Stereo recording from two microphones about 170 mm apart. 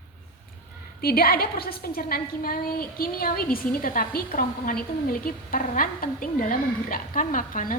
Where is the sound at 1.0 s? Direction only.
60° left (ahead or behind).